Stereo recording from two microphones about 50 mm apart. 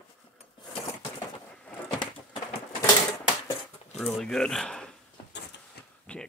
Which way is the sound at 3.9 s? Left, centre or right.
Centre.